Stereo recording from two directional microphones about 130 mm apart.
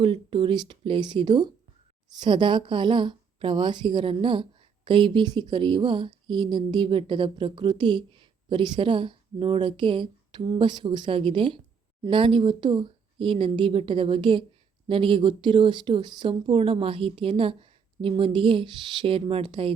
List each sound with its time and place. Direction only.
0.0 s a woman's voice: 45° right (ahead or behind)